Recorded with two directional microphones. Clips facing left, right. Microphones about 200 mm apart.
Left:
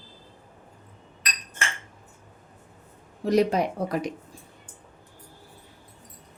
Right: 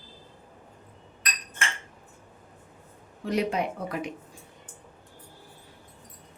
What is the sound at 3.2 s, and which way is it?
Speech, 40° left (ahead or behind).